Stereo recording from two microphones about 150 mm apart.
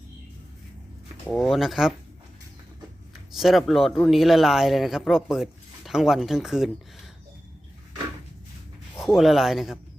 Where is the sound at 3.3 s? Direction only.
Centre (ahead or behind).